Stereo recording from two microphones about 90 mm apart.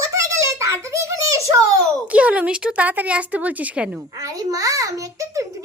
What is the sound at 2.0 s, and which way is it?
Speech, 15° right (ahead or behind).